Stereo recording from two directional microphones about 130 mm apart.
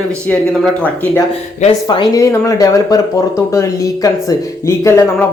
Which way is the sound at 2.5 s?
25° left (ahead or behind).